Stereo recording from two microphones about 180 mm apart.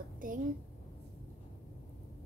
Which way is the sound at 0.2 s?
50° right (ahead or behind).